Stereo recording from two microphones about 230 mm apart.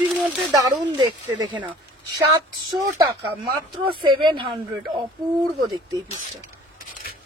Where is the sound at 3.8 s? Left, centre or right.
Right.